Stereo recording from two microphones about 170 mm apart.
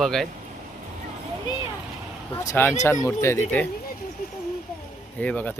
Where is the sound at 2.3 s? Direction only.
15° left (ahead or behind).